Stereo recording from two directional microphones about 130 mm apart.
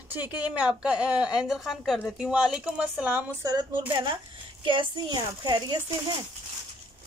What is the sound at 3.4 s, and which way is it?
A woman's voice, 30° right (ahead or behind).